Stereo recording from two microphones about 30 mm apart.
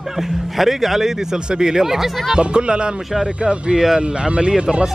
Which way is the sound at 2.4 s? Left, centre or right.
Right.